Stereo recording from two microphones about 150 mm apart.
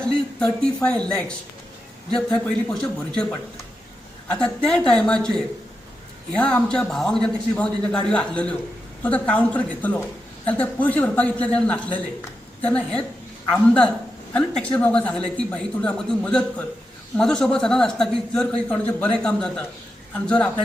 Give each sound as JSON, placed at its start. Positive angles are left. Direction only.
{"t": 0.0, "sound": "speech", "side_deg": 5}
{"t": 2.1, "sound": "speech", "side_deg": 5}
{"t": 4.3, "sound": "speech", "side_deg": 5}